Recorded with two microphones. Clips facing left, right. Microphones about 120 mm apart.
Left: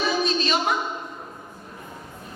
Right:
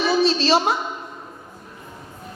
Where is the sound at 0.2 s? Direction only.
30° right (ahead or behind).